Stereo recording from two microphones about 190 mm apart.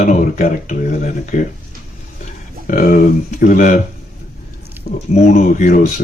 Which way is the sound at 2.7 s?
50° left (ahead or behind).